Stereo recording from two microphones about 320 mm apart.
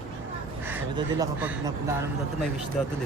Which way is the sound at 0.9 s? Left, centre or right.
Centre.